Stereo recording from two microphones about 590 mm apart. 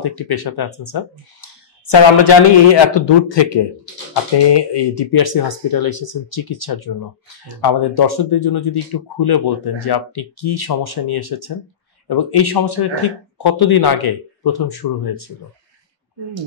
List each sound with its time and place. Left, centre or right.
0.0 s a man's voice: left